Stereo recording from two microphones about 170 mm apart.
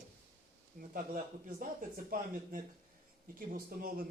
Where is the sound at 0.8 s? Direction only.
60° right (ahead or behind).